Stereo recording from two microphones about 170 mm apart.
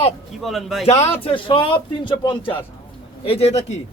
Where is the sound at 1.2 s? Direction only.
30° left (ahead or behind).